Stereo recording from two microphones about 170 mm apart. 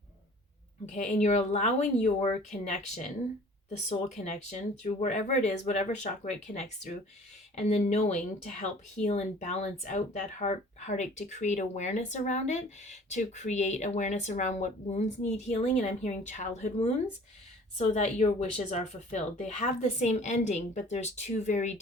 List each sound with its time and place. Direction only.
0.9 s speech: 45° left (ahead or behind)